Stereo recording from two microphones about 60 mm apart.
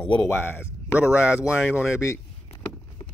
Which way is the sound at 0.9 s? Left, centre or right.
Centre.